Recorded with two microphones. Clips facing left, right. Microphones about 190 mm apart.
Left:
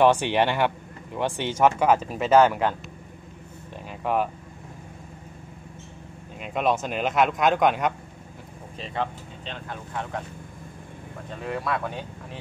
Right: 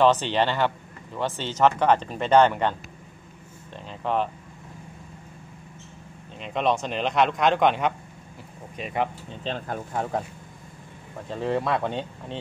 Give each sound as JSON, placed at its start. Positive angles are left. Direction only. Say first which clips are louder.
{"t": 0.0, "sound": "speech", "louder": "left 1 dB", "side_deg": 10}
{"t": 4.0, "sound": "speech", "louder": "left 1 dB", "side_deg": 10}
{"t": 6.4, "sound": "speech", "louder": "even", "side_deg": 5}
{"t": 8.8, "sound": "speech", "louder": "right 2 dB", "side_deg": -15}
{"t": 9.4, "sound": "speech", "louder": "right 7 dB", "side_deg": -40}
{"t": 11.4, "sound": "speech", "louder": "right 4 dB", "side_deg": -25}